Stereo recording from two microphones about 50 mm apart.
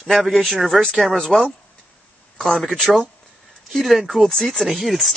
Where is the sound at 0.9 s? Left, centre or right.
Centre.